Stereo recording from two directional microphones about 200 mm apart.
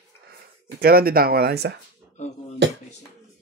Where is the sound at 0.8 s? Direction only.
50° right (ahead or behind).